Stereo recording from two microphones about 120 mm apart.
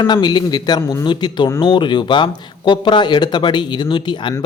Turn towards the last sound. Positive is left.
turn(degrees=40)  # may be behind; listen again after turning